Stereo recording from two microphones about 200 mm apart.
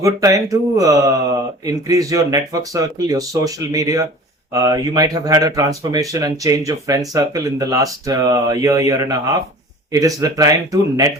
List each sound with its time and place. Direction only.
0.0 s speech: 15° right (ahead or behind)